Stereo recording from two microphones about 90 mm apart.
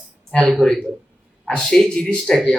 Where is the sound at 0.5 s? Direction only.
5° left (ahead or behind).